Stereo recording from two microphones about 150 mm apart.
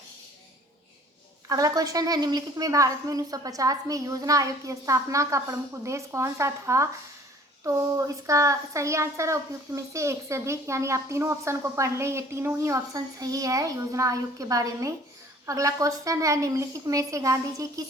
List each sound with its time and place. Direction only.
1.5 s speech: 20° right (ahead or behind)